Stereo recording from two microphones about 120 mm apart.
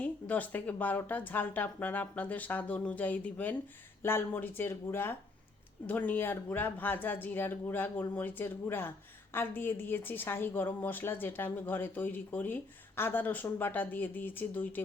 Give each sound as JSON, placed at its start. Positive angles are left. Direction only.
{"t": 0.0, "sound": "a woman's voice", "side_deg": 15}